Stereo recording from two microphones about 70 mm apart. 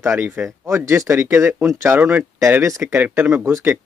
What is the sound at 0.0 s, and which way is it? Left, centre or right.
Speech, right.